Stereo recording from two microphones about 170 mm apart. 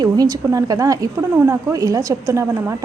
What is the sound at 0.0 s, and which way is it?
A woman's voice, 20° right (ahead or behind).